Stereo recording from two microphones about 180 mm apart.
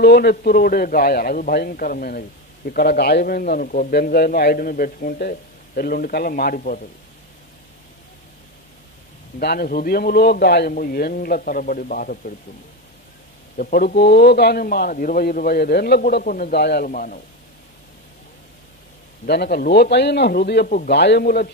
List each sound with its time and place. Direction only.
0.0 s a man's voice: 60° left (ahead or behind)
9.4 s a man's voice: 60° left (ahead or behind)
13.6 s a man's voice: 50° left (ahead or behind)
19.2 s a man's voice: 65° left (ahead or behind)